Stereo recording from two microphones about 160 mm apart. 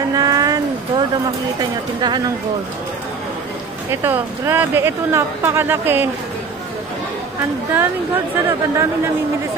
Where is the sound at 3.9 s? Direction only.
15° right (ahead or behind).